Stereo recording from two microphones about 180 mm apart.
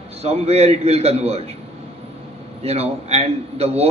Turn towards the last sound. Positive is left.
turn(degrees=-35)  # may be behind; listen again after turning